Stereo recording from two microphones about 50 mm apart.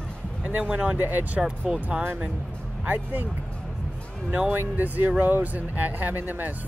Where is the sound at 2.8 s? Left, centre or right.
Right.